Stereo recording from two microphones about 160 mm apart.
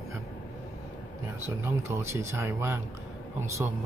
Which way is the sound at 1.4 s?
15° right (ahead or behind).